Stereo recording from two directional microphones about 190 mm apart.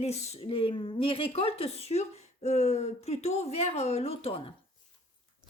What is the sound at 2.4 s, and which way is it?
Speech, 35° left (ahead or behind).